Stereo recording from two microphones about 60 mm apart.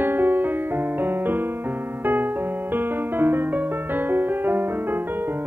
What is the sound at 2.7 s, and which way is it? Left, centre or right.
Music, right.